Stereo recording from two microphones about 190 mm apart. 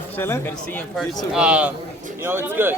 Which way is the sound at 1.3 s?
5° right (ahead or behind).